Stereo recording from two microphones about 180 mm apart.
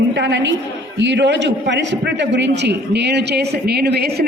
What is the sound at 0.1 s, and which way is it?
A woman's voice, 80° right.